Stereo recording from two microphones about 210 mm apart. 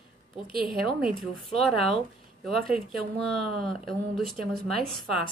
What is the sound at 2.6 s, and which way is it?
Speech, 45° right (ahead or behind).